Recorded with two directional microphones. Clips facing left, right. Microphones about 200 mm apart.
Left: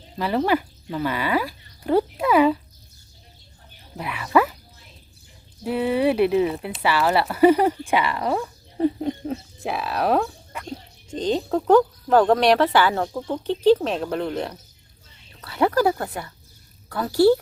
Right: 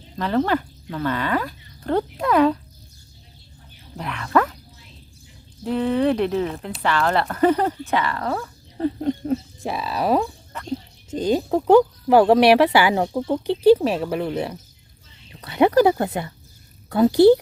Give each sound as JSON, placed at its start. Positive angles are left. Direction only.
{"t": 0.2, "sound": "speech", "side_deg": 10}
{"t": 3.9, "sound": "speech", "side_deg": 5}
{"t": 5.6, "sound": "speech", "side_deg": 10}
{"t": 10.5, "sound": "a sound", "side_deg": 10}
{"t": 11.1, "sound": "speech", "side_deg": -10}
{"t": 15.3, "sound": "speech", "side_deg": -15}